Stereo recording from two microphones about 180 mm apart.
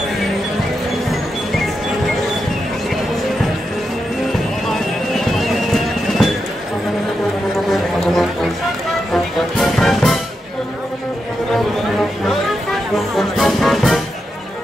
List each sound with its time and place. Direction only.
4.6 s music: centre (ahead or behind)
7.7 s music: centre (ahead or behind)
12.9 s music: centre (ahead or behind)